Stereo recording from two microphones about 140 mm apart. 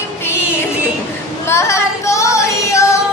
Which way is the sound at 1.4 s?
20° left (ahead or behind).